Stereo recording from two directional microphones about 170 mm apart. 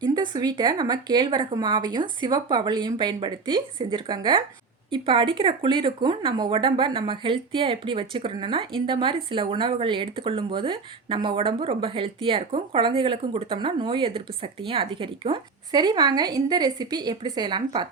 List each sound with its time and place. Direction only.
0.0 s speech: 25° right (ahead or behind)